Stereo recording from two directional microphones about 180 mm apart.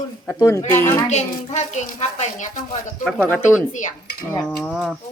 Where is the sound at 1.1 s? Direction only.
40° left (ahead or behind).